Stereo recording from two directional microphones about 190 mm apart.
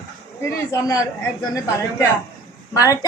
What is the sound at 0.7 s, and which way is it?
Speech, 15° left (ahead or behind).